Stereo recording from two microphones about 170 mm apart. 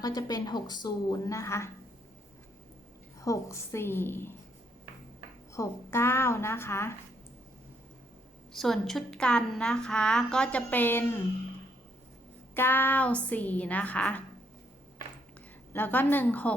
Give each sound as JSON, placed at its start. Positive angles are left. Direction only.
{"t": 0.0, "sound": "a woman's voice", "side_deg": 20}
{"t": 3.2, "sound": "a woman's voice", "side_deg": 15}
{"t": 5.5, "sound": "a woman's voice", "side_deg": 15}
{"t": 8.5, "sound": "a woman's voice", "side_deg": 0}
{"t": 12.5, "sound": "a woman's voice", "side_deg": 10}
{"t": 15.7, "sound": "a woman's voice", "side_deg": 10}